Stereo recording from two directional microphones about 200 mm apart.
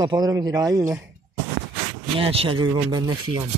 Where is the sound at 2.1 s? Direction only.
30° right (ahead or behind).